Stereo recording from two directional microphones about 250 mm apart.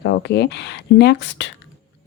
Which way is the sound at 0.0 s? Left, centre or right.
Left.